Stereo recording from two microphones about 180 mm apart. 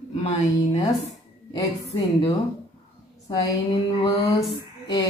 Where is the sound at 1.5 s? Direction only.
25° left (ahead or behind).